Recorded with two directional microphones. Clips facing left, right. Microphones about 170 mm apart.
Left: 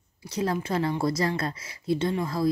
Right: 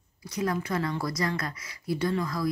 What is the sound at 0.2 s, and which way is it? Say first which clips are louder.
Speech: left 2 dB; 30° left (ahead or behind).